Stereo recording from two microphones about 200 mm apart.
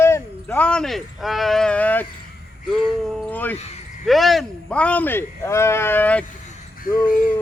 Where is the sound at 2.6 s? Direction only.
Centre (ahead or behind).